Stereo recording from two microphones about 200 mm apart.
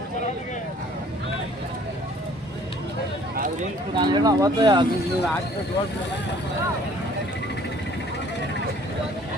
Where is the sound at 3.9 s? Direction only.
20° right (ahead or behind).